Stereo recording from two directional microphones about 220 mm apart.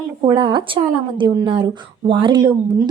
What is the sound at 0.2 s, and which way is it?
Speech, 20° right (ahead or behind).